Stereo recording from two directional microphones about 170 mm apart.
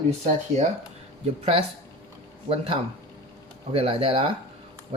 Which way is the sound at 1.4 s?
35° right (ahead or behind).